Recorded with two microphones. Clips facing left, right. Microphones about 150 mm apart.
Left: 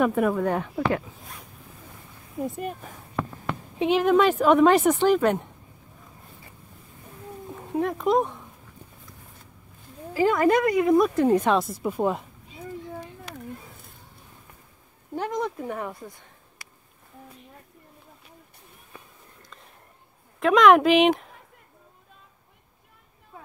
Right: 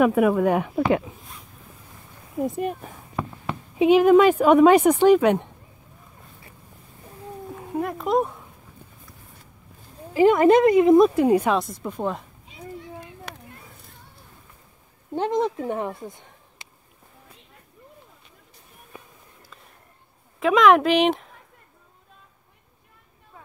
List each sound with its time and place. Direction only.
0.0 s speech: 5° right (ahead or behind)
2.4 s speech: 5° right (ahead or behind)
7.8 s speech: centre (ahead or behind)
10.1 s speech: 20° right (ahead or behind)
11.1 s speech: 10° right (ahead or behind)
11.5 s speech: 5° left (ahead or behind)
13.3 s a sound: 65° right (ahead or behind)
15.1 s a woman's voice: 25° right (ahead or behind)
20.3 s speech: centre (ahead or behind)